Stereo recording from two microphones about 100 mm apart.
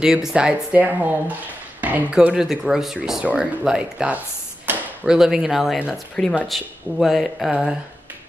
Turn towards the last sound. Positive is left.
turn(degrees=0)  # may be behind; listen again after turning